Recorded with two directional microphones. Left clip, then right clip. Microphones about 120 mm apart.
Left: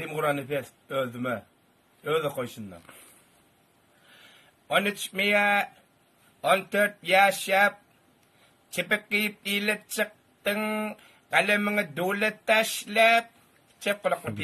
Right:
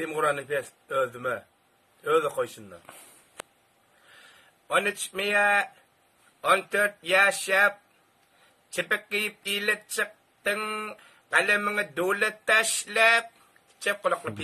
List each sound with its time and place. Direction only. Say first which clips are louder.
0.0 s speech: right 1 dB; 25° right (ahead or behind)
4.1 s a sound: right 1 dB; 25° right (ahead or behind)
4.8 s speech: left 2 dB; 25° right (ahead or behind)
8.7 s speech: left 1 dB; 25° right (ahead or behind)